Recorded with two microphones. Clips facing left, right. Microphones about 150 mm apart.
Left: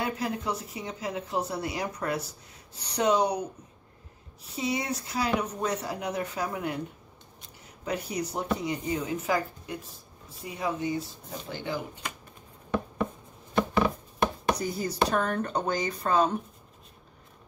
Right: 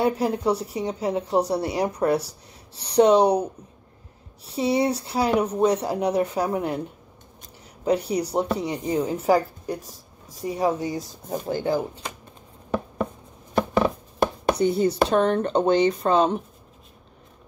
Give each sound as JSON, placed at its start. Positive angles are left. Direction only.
{"t": 0.0, "sound": "speech", "side_deg": -35}
{"t": 4.5, "sound": "speech", "side_deg": -35}
{"t": 7.8, "sound": "speech", "side_deg": -35}
{"t": 14.6, "sound": "speech", "side_deg": -30}